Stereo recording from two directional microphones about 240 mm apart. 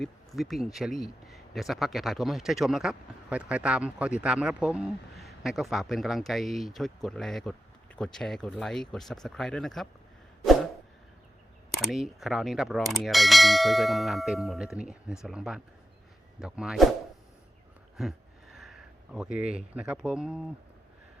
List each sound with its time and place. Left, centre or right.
0.0 s speech: centre
10.4 s a sound: centre
11.7 s speech: centre
17.9 s speech: centre